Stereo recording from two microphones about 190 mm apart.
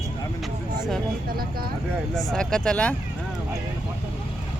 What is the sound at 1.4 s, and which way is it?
Speech, 50° right (ahead or behind).